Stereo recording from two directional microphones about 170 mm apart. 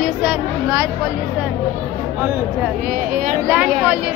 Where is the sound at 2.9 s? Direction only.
50° right (ahead or behind).